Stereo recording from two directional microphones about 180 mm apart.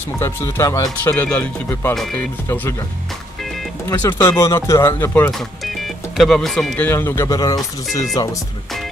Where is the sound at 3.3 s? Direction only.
Centre (ahead or behind).